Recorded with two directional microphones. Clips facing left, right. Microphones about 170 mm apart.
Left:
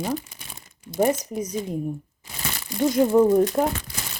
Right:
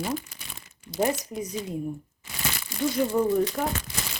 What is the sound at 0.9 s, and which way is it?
Speech, 50° left (ahead or behind).